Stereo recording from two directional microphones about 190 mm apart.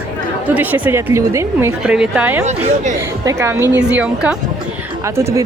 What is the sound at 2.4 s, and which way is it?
Speech, 35° right (ahead or behind).